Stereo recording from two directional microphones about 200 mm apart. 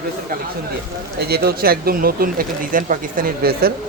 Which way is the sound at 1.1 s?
50° right (ahead or behind).